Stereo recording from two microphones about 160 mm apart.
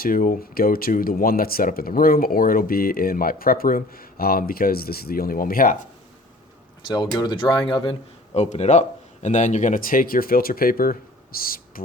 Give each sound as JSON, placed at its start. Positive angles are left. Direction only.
{"t": 0.0, "sound": "speech", "side_deg": 60}
{"t": 6.8, "sound": "speech", "side_deg": 25}